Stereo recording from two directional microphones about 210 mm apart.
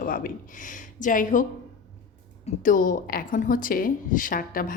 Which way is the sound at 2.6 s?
40° left (ahead or behind).